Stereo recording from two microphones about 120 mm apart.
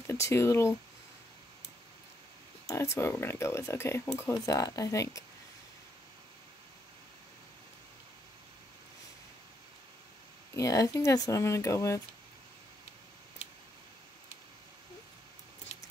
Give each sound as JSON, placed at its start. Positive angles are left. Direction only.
{"t": 0.0, "sound": "speech", "side_deg": 20}
{"t": 2.7, "sound": "speech", "side_deg": 25}
{"t": 10.5, "sound": "speech", "side_deg": 25}